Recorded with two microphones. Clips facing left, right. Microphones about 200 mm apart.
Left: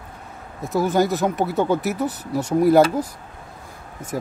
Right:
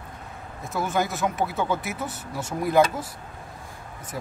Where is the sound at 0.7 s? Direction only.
35° left (ahead or behind).